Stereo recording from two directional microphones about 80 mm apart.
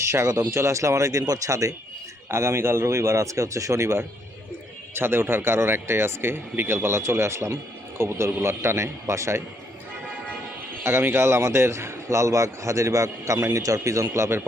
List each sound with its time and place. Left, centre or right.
0.0 s speech: right
2.3 s speech: right
10.8 s speech: right